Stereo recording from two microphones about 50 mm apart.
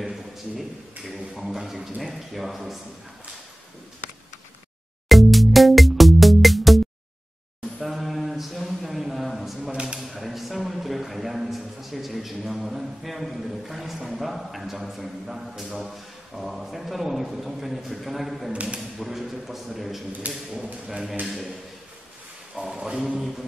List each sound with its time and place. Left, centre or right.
0.0 s a man's voice: centre
5.0 s music: centre
7.8 s a sound: centre
9.6 s a sound: centre
9.9 s a man's voice: centre
18.5 s speech: right
18.8 s a man's voice: centre
20.2 s speech: right
20.6 s speech: centre
22.7 s speech: centre